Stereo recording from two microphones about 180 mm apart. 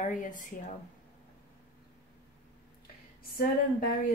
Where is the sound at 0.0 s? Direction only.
45° left (ahead or behind).